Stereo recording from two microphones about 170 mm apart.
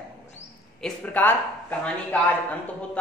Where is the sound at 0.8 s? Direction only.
10° left (ahead or behind).